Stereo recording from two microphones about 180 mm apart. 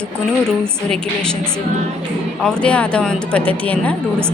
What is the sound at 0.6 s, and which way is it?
A woman's voice, 5° left (ahead or behind).